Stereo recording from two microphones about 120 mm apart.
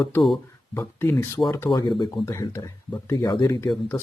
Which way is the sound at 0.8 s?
20° left (ahead or behind).